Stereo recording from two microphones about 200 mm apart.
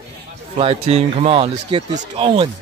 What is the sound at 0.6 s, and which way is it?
Speech, 30° right (ahead or behind).